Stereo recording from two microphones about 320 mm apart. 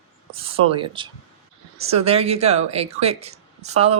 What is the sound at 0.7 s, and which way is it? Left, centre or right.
A woman's voice, centre.